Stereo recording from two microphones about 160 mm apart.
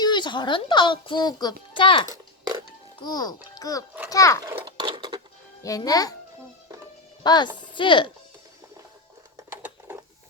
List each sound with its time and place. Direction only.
0.0 s a child's voice: 30° left (ahead or behind)
2.0 s oink: 20° right (ahead or behind)
3.0 s a child's voice: 25° left (ahead or behind)
4.6 s a sound: 30° right (ahead or behind)
5.6 s a child's voice: 20° left (ahead or behind)
7.2 s speech: 25° left (ahead or behind)
9.6 s sewing machine: 15° right (ahead or behind)